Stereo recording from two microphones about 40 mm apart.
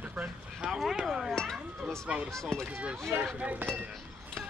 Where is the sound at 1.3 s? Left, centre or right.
Centre.